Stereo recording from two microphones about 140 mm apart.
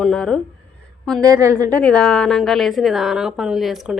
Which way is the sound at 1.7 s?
5° left (ahead or behind).